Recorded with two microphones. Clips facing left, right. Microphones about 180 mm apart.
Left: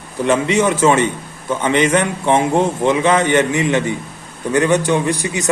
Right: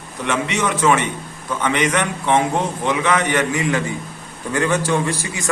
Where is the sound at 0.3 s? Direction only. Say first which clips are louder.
Left 6 dB; 30° left (ahead or behind).